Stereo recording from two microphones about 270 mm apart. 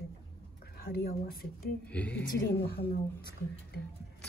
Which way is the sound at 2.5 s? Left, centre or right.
Left.